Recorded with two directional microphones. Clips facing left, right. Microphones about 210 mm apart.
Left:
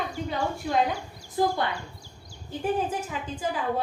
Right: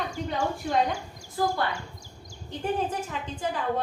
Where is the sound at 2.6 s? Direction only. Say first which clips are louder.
Left 1 dB; 5° left (ahead or behind).